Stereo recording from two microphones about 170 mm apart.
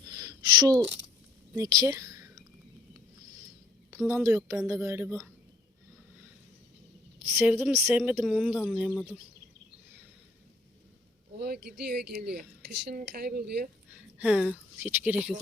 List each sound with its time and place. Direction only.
0.0 s a sound: 25° right (ahead or behind)
1.5 s speech: 20° right (ahead or behind)
3.9 s a woman's voice: 15° right (ahead or behind)
4.4 s speech: 5° right (ahead or behind)
4.7 s a woman's voice: 15° right (ahead or behind)
7.3 s speech: 5° right (ahead or behind)
8.9 s speech: 5° left (ahead or behind)
11.3 s speech: 65° right (ahead or behind)
13.9 s a sound: 5° right (ahead or behind)
14.8 s a woman's voice: 10° right (ahead or behind)